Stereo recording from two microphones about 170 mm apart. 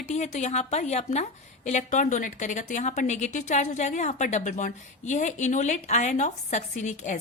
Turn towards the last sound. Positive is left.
turn(degrees=45)  # may be behind; listen again after turning